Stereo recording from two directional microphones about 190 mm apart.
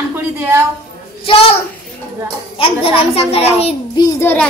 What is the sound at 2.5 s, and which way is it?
A child's voice, 30° left (ahead or behind).